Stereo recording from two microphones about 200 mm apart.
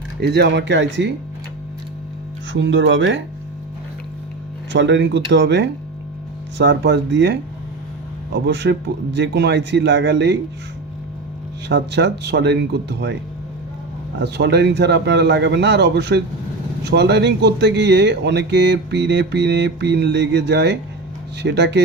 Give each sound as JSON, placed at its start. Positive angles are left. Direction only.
{"t": 0.2, "sound": "speech", "side_deg": -55}
{"t": 2.5, "sound": "speech", "side_deg": -65}
{"t": 4.7, "sound": "speech", "side_deg": -65}
{"t": 11.7, "sound": "speech", "side_deg": -60}
{"t": 14.2, "sound": "speech", "side_deg": -60}